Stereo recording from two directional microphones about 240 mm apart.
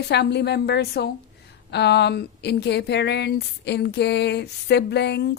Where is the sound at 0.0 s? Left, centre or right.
Left.